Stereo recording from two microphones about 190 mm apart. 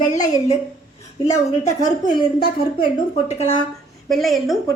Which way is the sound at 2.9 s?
35° left (ahead or behind).